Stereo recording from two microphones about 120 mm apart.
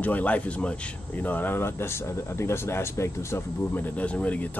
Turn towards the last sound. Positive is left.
turn(degrees=10)  # may be behind; listen again after turning